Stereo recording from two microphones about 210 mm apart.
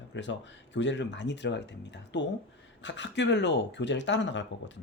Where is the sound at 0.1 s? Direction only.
60° left (ahead or behind).